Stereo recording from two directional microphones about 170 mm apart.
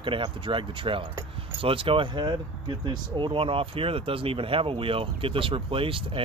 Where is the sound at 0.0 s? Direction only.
30° right (ahead or behind).